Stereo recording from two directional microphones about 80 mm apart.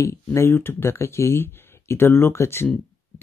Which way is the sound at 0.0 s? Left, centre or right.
Left.